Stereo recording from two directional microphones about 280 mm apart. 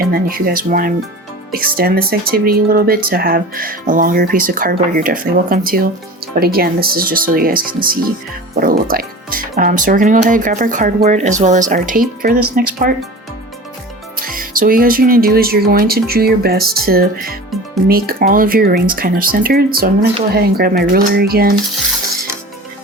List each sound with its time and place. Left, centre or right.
0.0 s speech: right
14.2 s speech: right